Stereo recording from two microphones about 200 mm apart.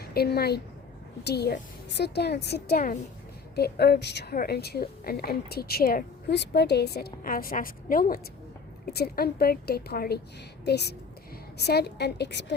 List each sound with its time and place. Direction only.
0.0 s a woman's voice: 50° left (ahead or behind)